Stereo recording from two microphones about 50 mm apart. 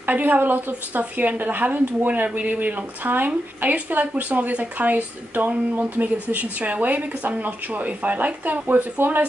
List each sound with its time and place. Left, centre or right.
0.0 s a woman's voice: right